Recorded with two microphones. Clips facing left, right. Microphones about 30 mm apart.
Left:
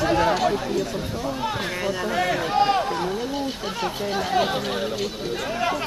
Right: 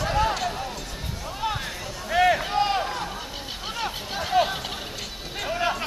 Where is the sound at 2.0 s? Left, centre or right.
Centre.